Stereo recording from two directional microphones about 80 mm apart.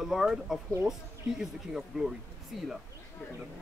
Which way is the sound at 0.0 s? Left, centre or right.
Centre.